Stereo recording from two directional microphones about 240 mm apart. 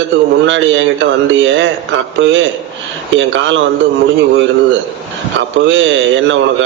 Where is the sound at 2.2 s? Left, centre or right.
Right.